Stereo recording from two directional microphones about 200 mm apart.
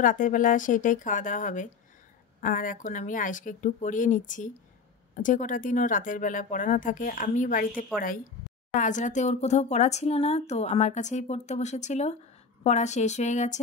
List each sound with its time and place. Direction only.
0.0 s speech: 40° left (ahead or behind)